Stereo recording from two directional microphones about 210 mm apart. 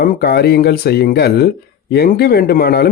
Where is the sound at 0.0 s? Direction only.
45° left (ahead or behind).